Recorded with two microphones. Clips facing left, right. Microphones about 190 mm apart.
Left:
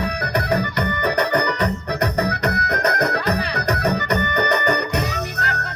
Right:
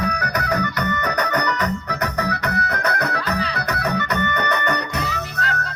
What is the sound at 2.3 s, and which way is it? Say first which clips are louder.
Music: left 2 dB; 35° left (ahead or behind).